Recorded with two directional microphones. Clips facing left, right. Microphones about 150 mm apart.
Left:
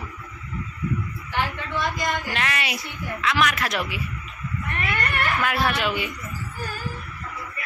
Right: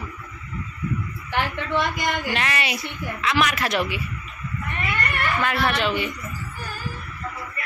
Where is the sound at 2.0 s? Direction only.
70° right (ahead or behind).